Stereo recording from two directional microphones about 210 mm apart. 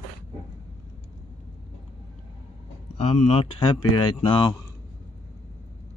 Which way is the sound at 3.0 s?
30° left (ahead or behind).